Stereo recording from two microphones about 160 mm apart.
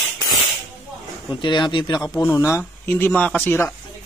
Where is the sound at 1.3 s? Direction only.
30° left (ahead or behind).